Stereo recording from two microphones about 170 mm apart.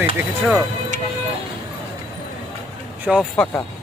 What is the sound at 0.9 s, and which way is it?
Music, 45° right (ahead or behind).